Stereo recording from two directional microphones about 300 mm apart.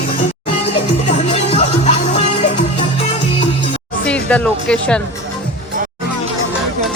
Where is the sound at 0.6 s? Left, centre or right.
Left.